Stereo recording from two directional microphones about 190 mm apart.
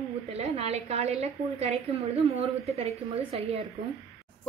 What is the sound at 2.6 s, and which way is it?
Speech, 30° right (ahead or behind).